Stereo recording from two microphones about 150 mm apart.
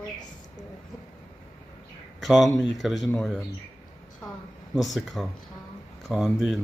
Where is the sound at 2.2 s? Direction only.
Centre (ahead or behind).